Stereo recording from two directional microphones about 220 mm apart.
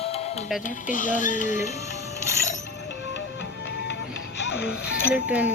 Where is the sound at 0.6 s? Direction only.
35° left (ahead or behind).